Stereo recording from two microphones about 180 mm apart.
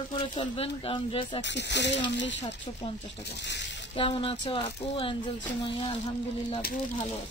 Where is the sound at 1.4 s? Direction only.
75° left (ahead or behind).